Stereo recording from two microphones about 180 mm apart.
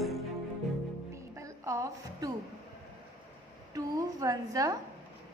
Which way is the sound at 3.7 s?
20° right (ahead or behind).